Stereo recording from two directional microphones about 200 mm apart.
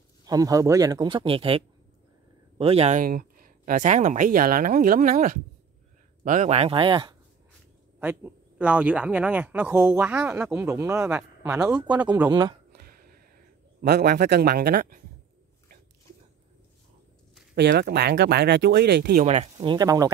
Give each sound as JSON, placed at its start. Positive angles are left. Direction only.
{"t": 0.2, "sound": "a man's voice", "side_deg": -20}
{"t": 8.0, "sound": "speech", "side_deg": -10}
{"t": 12.3, "sound": "a man's voice", "side_deg": -20}
{"t": 12.7, "sound": "a sound", "side_deg": -50}
{"t": 13.7, "sound": "speech", "side_deg": -50}
{"t": 17.6, "sound": "speech", "side_deg": -55}
{"t": 19.2, "sound": "a man's voice", "side_deg": -30}